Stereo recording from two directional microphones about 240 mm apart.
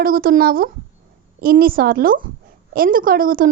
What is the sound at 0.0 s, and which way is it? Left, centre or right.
A woman's voice, right.